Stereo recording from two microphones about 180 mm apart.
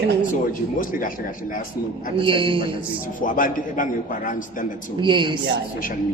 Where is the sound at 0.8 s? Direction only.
50° left (ahead or behind).